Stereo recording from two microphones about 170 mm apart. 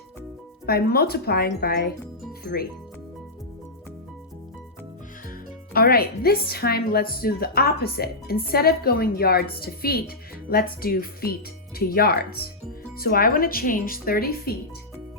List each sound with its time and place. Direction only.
0.6 s a woman's voice: 65° left (ahead or behind)
5.7 s a woman's voice: 65° left (ahead or behind)